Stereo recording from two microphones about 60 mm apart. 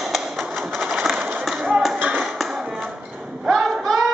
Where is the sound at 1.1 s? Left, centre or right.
Right.